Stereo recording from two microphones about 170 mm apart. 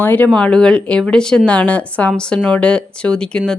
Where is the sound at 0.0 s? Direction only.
10° left (ahead or behind).